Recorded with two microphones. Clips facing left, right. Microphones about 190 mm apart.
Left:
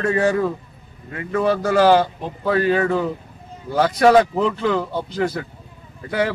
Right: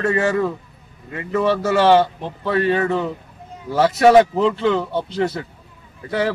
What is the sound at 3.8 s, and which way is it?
Speech, 25° right (ahead or behind).